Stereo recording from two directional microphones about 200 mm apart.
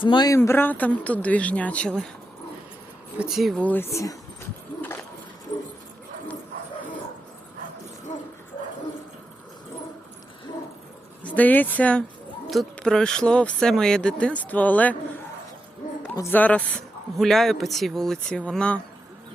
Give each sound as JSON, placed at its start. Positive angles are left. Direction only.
{"t": 0.0, "sound": "a man's voice", "side_deg": 20}
{"t": 3.2, "sound": "a man's voice", "side_deg": 0}
{"t": 8.1, "sound": "dog", "side_deg": 35}
{"t": 11.2, "sound": "a man's voice", "side_deg": 5}
{"t": 16.1, "sound": "a man's voice", "side_deg": 10}